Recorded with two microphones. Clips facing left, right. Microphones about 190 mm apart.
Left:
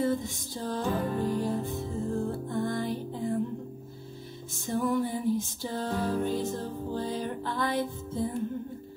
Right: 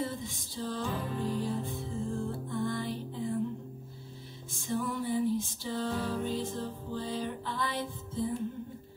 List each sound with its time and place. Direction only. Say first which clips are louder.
0.0 s music: left 8 dB; 50° left (ahead or behind)
4.6 s music: left 4 dB; 50° left (ahead or behind)